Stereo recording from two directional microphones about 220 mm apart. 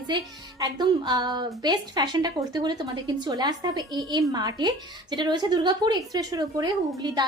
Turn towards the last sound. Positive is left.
turn(degrees=-20)  # may be behind; listen again after turning